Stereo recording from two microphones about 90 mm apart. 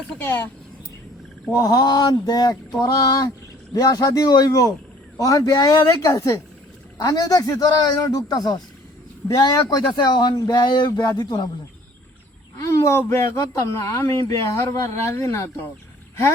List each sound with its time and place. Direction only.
0.2 s speech: 25° left (ahead or behind)
1.5 s speech: 50° left (ahead or behind)
9.8 s speech: 55° left (ahead or behind)
12.5 s a sound: 35° left (ahead or behind)
13.1 s speech: 30° left (ahead or behind)